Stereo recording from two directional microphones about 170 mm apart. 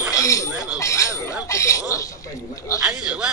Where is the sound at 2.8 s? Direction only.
5° right (ahead or behind).